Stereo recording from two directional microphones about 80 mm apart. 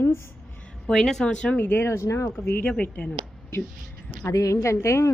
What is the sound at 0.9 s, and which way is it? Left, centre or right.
Speech, centre.